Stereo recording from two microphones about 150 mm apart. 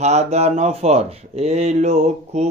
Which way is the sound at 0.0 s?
50° right (ahead or behind).